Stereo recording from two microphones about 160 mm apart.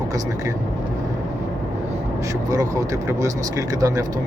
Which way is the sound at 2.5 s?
20° right (ahead or behind).